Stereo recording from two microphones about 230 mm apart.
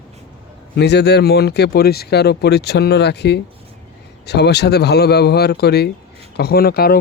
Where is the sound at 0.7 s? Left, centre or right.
Left.